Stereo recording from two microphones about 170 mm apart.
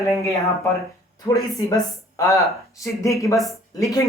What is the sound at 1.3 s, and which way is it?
Speech, 20° left (ahead or behind).